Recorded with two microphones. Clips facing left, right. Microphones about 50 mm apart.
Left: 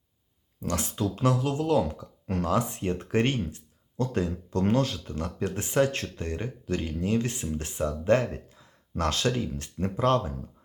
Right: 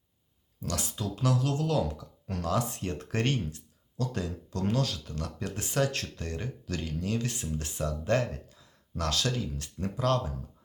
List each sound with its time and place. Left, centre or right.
0.6 s speech: left